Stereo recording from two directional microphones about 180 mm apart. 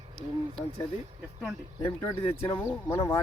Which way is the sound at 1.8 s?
15° left (ahead or behind).